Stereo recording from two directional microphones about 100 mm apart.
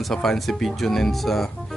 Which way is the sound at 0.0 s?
5° left (ahead or behind).